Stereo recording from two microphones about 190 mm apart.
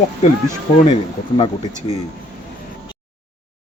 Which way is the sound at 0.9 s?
30° left (ahead or behind).